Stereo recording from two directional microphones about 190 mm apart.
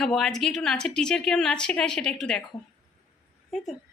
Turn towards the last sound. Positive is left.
turn(degrees=0)  # may be behind; listen again after turning